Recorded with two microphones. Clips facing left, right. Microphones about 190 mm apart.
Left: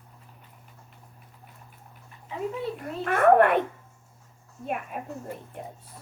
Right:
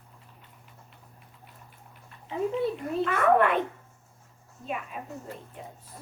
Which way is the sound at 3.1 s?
55° left (ahead or behind).